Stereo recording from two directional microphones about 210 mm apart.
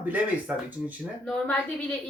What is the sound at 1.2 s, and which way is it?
Speech, 5° left (ahead or behind).